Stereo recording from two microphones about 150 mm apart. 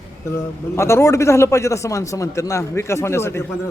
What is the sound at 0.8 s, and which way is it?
A man's voice, 20° left (ahead or behind).